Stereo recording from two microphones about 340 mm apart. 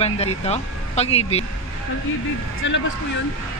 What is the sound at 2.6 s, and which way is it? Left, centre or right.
Speech, left.